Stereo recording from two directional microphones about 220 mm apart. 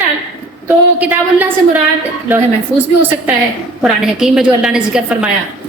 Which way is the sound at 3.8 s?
5° right (ahead or behind).